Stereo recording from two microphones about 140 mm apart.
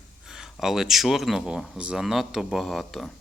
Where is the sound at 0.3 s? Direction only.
5° right (ahead or behind).